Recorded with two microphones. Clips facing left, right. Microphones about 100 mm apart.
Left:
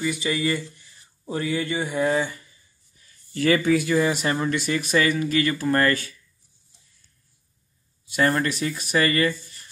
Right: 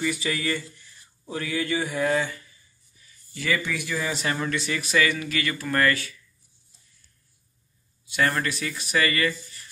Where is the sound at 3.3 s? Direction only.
55° left (ahead or behind).